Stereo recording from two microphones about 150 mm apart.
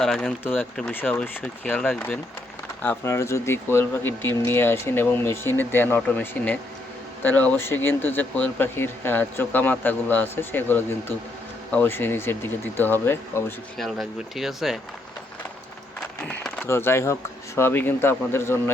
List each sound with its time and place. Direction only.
0.0 s speech: centre (ahead or behind)
13.7 s speech: centre (ahead or behind)
16.0 s speech: 5° left (ahead or behind)